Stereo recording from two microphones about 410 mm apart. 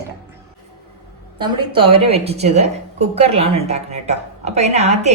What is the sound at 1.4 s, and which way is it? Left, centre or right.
Speech, centre.